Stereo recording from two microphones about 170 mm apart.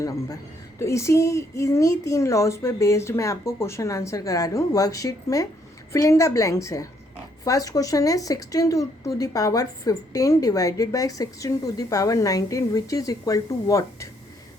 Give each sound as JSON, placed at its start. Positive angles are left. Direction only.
{"t": 0.8, "sound": "a woman's voice", "side_deg": 15}